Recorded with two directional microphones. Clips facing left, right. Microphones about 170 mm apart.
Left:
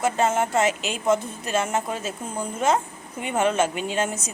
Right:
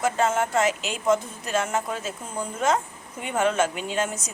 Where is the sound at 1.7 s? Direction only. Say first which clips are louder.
Left 1 dB; 25° left (ahead or behind).